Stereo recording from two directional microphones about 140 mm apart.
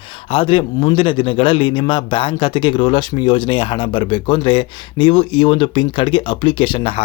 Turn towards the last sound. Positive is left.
turn(degrees=40)  # may be behind; listen again after turning